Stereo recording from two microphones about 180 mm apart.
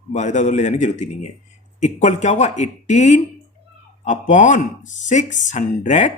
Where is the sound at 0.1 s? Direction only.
40° left (ahead or behind).